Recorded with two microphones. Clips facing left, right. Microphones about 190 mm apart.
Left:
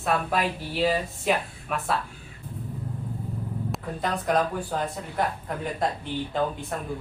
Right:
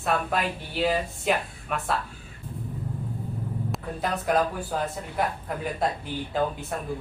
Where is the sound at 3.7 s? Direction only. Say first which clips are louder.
Left 1 dB; 5° right (ahead or behind).